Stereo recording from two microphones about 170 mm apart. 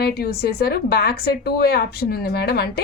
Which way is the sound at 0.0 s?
65° left (ahead or behind).